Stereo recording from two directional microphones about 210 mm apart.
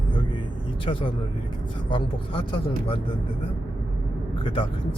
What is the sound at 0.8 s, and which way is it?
Speech, 25° left (ahead or behind).